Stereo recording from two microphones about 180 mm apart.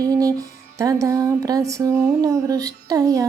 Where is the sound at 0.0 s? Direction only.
20° right (ahead or behind).